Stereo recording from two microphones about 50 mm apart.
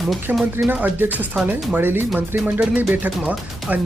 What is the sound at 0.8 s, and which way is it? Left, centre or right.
Speech, right.